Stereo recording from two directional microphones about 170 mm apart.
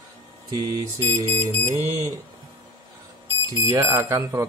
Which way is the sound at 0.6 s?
20° right (ahead or behind).